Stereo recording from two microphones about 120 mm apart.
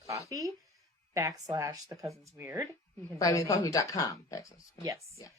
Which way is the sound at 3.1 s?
30° left (ahead or behind).